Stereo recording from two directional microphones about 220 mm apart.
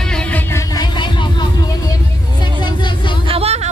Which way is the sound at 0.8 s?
20° left (ahead or behind).